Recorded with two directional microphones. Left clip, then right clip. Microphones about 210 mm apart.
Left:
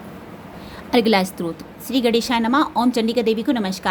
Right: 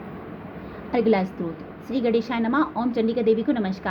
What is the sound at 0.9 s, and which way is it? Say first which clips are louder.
A woman's voice: left 4 dB; 25° left (ahead or behind).